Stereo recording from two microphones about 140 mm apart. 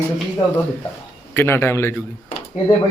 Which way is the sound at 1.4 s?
20° left (ahead or behind).